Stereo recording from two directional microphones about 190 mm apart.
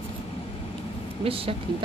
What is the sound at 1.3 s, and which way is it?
Speech, 30° right (ahead or behind).